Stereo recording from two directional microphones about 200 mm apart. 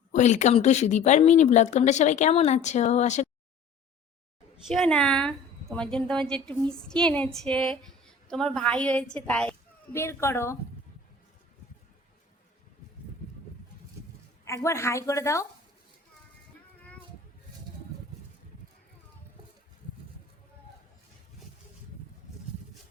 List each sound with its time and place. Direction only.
0.1 s speech: 35° left (ahead or behind)
4.5 s a woman's voice: centre (ahead or behind)
14.4 s a woman's voice: 15° left (ahead or behind)